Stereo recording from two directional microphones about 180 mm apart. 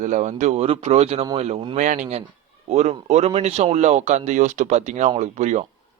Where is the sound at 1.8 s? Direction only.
40° right (ahead or behind).